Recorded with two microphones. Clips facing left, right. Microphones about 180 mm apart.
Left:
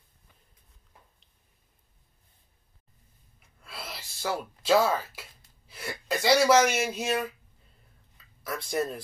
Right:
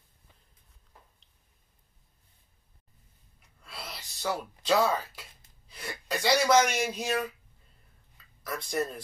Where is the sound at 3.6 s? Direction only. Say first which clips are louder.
Left 2 dB; centre (ahead or behind).